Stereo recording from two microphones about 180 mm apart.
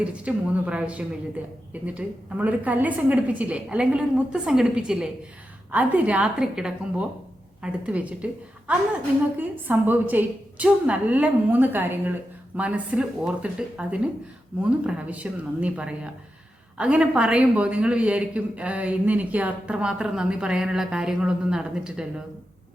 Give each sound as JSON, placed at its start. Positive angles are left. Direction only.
{"t": 0.0, "sound": "a woman's voice", "side_deg": -5}